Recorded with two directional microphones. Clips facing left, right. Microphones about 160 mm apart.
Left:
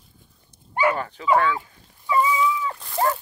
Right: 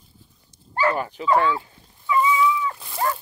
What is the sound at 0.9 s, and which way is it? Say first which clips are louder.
Dog: right 2 dB; 15° right (ahead or behind).